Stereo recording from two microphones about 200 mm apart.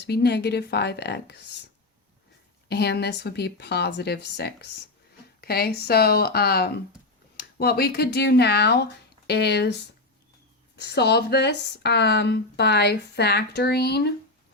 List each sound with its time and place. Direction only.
0.0 s speech: 55° left (ahead or behind)
2.6 s speech: 55° left (ahead or behind)
10.8 s speech: 55° left (ahead or behind)